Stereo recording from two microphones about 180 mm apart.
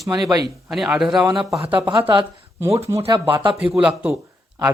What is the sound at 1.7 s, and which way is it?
Speech, 20° right (ahead or behind).